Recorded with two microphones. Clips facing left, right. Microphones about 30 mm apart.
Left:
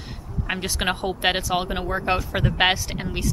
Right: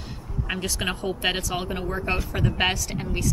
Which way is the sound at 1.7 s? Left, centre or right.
Left.